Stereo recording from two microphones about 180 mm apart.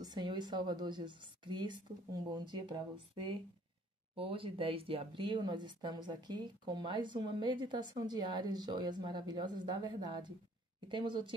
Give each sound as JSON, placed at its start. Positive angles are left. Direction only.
{"t": 0.0, "sound": "speech", "side_deg": -25}